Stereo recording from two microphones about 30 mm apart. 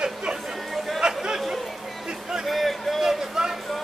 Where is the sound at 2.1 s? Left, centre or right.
Centre.